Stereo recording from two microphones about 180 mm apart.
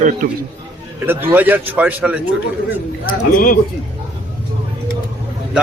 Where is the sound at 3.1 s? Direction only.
50° left (ahead or behind).